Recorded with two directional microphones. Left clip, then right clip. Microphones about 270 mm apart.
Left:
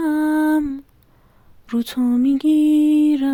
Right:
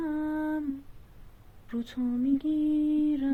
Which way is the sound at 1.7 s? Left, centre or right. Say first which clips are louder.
Left 12 dB; left.